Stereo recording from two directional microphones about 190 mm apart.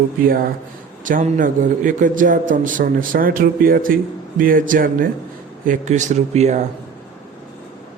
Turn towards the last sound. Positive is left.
turn(degrees=-35)  # may be behind; listen again after turning